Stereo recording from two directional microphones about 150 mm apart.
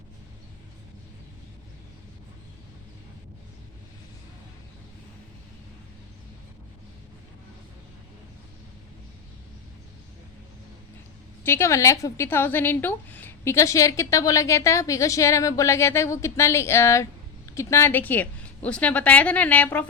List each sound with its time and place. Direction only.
11.4 s a woman's voice: 15° left (ahead or behind)